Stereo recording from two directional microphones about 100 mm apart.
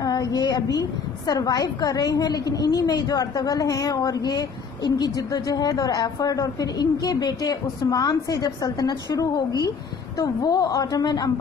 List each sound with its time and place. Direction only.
0.0 s a woman's voice: 40° left (ahead or behind)